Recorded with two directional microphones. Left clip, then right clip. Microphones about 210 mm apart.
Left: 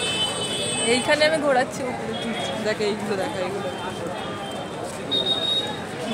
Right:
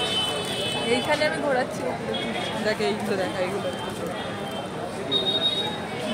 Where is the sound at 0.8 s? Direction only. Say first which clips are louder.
Left 5 dB; 40° left (ahead or behind).